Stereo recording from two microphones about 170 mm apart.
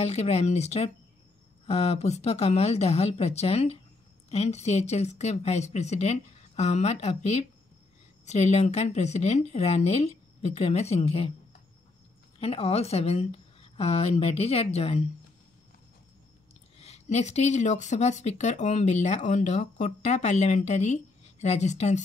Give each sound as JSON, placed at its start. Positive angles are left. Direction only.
{"t": 0.0, "sound": "speech", "side_deg": 40}
{"t": 12.4, "sound": "speech", "side_deg": 35}
{"t": 16.7, "sound": "speech", "side_deg": 40}